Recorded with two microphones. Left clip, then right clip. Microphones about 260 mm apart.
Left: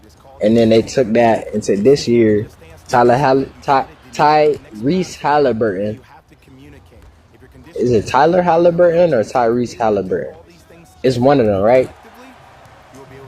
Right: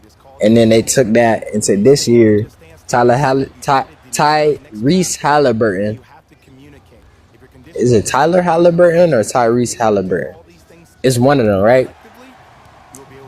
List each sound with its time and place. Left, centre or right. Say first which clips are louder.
0.3 s speech: right 2 dB; right
7.9 s speech: even; right